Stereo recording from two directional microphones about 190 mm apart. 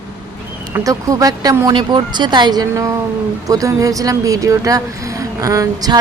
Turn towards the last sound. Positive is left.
turn(degrees=-20)  # may be behind; listen again after turning